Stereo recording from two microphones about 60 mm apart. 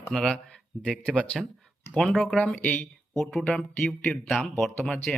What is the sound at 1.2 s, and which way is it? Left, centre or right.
Speech, centre.